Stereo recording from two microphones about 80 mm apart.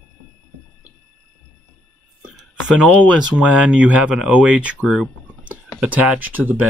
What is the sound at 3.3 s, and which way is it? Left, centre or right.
Speech, centre.